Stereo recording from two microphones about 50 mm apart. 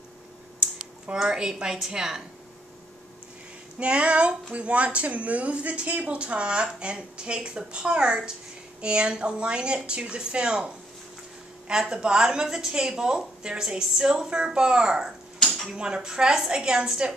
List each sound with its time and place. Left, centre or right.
0.6 s speech: centre
3.8 s a woman's voice: right
11.9 s a woman's voice: centre
15.3 s a sound: centre
15.7 s a woman's voice: centre